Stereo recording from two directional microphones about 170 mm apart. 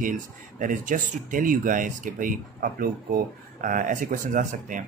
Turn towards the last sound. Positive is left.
turn(degrees=-50)  # may be behind; listen again after turning